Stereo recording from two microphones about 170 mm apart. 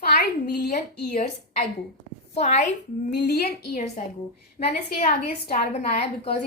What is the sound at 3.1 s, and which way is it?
Speech, 75° left (ahead or behind).